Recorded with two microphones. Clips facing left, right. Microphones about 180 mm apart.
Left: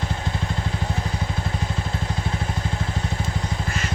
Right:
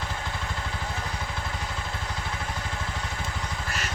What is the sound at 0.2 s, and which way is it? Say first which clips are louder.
Vehicle: left 6 dB; 25° left (ahead or behind).